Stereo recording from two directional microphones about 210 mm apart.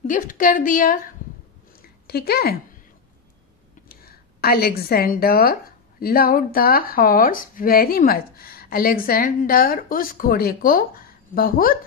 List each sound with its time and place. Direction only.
0.0 s a woman's voice: 40° left (ahead or behind)
1.8 s a sound: 50° left (ahead or behind)
3.9 s speech: 45° left (ahead or behind)